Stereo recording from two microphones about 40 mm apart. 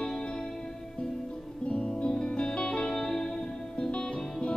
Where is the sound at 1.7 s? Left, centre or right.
Left.